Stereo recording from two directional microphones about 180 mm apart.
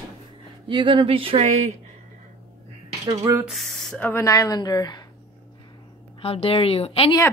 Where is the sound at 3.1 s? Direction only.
20° right (ahead or behind).